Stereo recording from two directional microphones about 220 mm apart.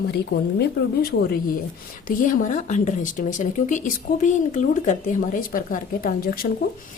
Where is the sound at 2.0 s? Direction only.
35° left (ahead or behind).